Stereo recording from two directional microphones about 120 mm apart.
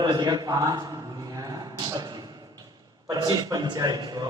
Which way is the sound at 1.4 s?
30° right (ahead or behind).